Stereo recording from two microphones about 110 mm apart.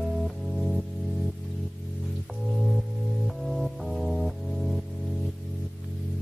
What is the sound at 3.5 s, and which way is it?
Music, centre (ahead or behind).